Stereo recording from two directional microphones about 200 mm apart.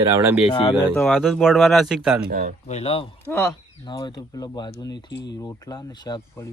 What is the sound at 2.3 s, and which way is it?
Speech, 45° right (ahead or behind).